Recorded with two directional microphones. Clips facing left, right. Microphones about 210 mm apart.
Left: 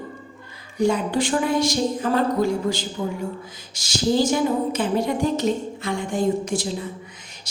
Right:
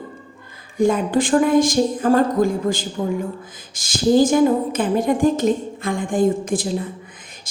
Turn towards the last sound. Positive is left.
turn(degrees=-50)  # may be behind; listen again after turning